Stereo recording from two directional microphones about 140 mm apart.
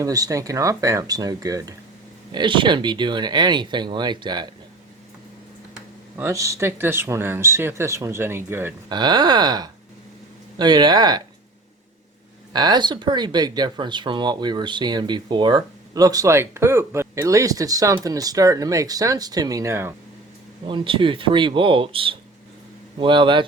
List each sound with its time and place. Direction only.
0.0 s speech: 25° right (ahead or behind)
2.3 s speech: 35° right (ahead or behind)
6.1 s speech: 20° right (ahead or behind)
8.9 s speech: 30° right (ahead or behind)
12.5 s speech: 30° right (ahead or behind)
20.7 s speech: 35° right (ahead or behind)